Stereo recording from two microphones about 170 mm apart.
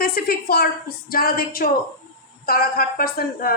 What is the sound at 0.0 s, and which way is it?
A woman's voice, 60° left (ahead or behind).